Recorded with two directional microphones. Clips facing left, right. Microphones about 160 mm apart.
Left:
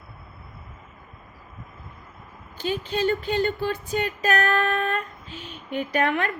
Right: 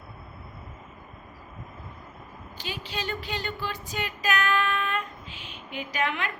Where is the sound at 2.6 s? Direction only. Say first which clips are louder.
Left 10 dB; 45° left (ahead or behind).